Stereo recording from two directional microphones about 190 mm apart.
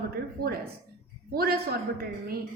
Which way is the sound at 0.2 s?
55° right (ahead or behind).